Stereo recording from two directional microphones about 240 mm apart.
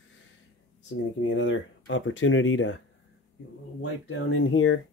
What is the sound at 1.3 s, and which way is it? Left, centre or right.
Speech, left.